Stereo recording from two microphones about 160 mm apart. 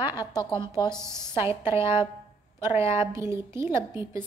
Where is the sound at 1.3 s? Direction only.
15° right (ahead or behind).